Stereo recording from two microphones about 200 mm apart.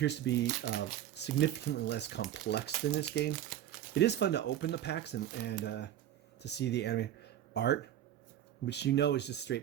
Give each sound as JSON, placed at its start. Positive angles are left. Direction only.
{"t": 0.0, "sound": "speech", "side_deg": 60}